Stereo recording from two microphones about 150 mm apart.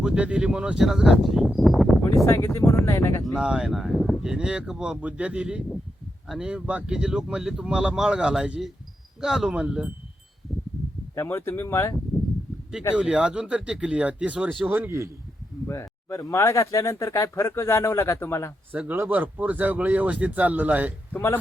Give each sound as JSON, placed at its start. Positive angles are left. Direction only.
{"t": 0.0, "sound": "speech", "side_deg": -5}
{"t": 2.2, "sound": "speech", "side_deg": 20}
{"t": 3.3, "sound": "speech", "side_deg": -5}
{"t": 11.1, "sound": "speech", "side_deg": 20}
{"t": 13.0, "sound": "speech", "side_deg": -5}
{"t": 15.6, "sound": "speech", "side_deg": 20}
{"t": 18.7, "sound": "speech", "side_deg": -10}
{"t": 21.1, "sound": "speech", "side_deg": 10}